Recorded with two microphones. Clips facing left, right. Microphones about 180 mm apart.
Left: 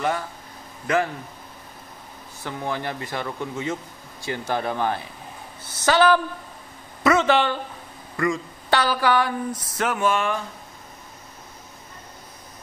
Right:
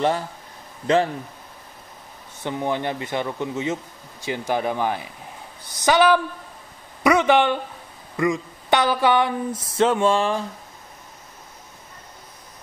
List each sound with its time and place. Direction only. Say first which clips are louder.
2.4 s a woman's voice: right 4 dB; 20° right (ahead or behind)
7.0 s a sound: right 2 dB; 15° right (ahead or behind)
8.2 s speech: right 2 dB; 20° right (ahead or behind)